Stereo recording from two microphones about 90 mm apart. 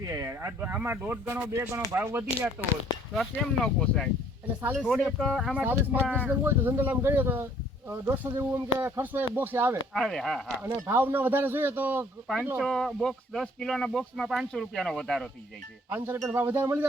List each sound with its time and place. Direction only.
0.1 s speech: 30° right (ahead or behind)
1.5 s speech: 30° right (ahead or behind)
3.2 s speech: centre (ahead or behind)
5.5 s speech: 20° right (ahead or behind)
9.9 s speech: 5° left (ahead or behind)
10.6 s speech: 25° right (ahead or behind)
12.5 s speech: centre (ahead or behind)
15.9 s speech: 25° right (ahead or behind)